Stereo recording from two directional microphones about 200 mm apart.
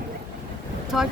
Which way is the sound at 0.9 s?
Centre (ahead or behind).